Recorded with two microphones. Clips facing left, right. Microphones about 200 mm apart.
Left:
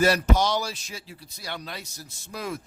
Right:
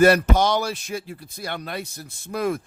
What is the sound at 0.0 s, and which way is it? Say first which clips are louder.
Speech: right 5 dB; 55° right (ahead or behind).